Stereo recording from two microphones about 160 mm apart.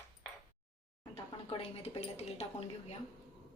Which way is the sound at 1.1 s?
35° left (ahead or behind).